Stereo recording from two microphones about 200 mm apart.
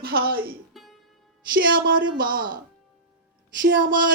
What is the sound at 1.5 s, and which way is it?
A woman's voice, 45° right (ahead or behind).